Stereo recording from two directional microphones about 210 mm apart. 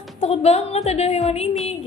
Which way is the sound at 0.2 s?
30° left (ahead or behind).